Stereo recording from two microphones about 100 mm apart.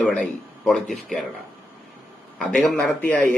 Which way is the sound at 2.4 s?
10° left (ahead or behind).